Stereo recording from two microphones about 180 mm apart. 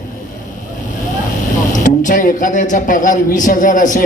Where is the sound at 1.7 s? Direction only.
45° left (ahead or behind).